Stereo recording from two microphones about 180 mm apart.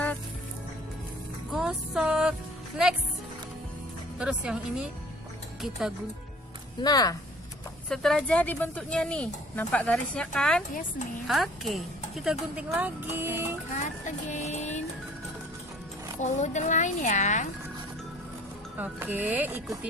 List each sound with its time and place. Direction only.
1.5 s music: 5° right (ahead or behind)
4.2 s speech: 5° right (ahead or behind)
6.8 s speech: 20° left (ahead or behind)
7.9 s speech: 5° left (ahead or behind); by 13.6 s 15° right (ahead or behind)
13.7 s music: 45° left (ahead or behind)
16.2 s speech: 40° left (ahead or behind)
18.8 s speech: 10° right (ahead or behind)